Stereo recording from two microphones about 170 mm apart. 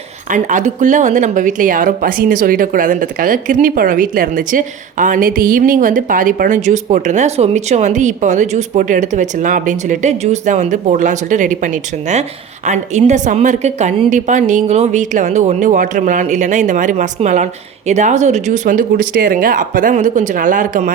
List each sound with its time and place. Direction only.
0.3 s speech: 45° right (ahead or behind)